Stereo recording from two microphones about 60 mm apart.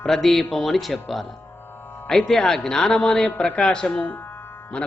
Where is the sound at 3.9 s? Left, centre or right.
Left.